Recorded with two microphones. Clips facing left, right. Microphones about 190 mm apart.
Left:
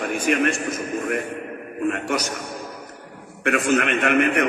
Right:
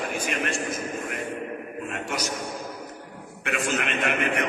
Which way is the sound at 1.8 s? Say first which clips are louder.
Left 9 dB; 60° left (ahead or behind).